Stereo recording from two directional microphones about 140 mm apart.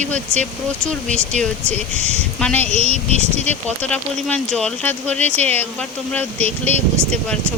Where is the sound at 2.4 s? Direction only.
10° left (ahead or behind).